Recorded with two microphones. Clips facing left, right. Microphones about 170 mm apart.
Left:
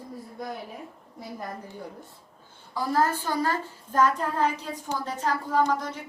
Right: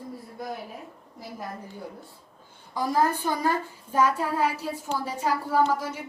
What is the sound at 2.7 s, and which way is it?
A woman's voice, 15° right (ahead or behind).